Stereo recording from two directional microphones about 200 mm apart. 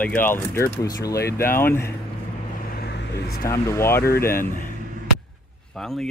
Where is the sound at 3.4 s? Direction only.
15° left (ahead or behind).